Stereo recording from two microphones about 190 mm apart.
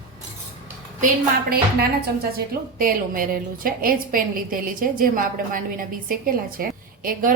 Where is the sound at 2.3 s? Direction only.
50° right (ahead or behind).